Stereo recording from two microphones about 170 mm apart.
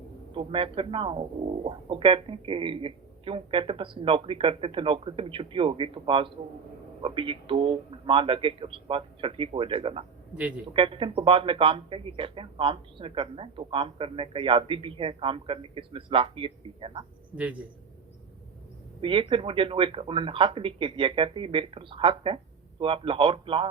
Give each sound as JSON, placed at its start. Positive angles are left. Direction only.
{"t": 0.3, "sound": "speech", "side_deg": -30}
{"t": 17.3, "sound": "a man's voice", "side_deg": -10}
{"t": 19.0, "sound": "speech", "side_deg": -30}